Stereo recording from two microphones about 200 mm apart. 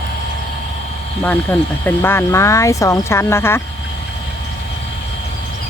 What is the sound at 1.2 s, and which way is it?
Speech, 10° left (ahead or behind).